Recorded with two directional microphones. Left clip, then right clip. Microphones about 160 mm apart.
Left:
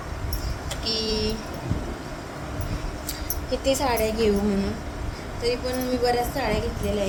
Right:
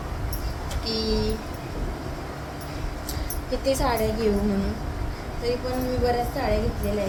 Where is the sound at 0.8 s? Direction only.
45° left (ahead or behind).